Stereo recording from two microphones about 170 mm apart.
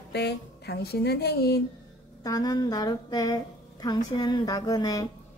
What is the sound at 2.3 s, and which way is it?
A woman's voice, 20° left (ahead or behind).